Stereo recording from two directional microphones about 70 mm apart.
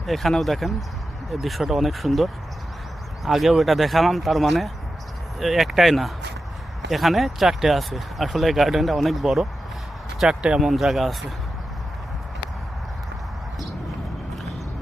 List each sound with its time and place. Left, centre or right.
0.0 s speech: centre
10.7 s speech: centre